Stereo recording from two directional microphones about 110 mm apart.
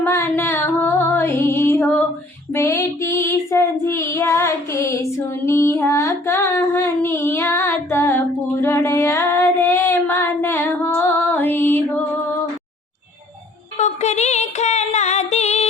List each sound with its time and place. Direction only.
0.0 s music: 20° left (ahead or behind)
2.5 s child singing: 25° left (ahead or behind)
13.7 s a sound: 90° left